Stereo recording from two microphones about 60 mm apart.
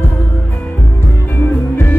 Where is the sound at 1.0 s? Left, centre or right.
Left.